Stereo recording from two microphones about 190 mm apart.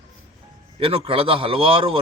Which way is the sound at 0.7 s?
30° right (ahead or behind).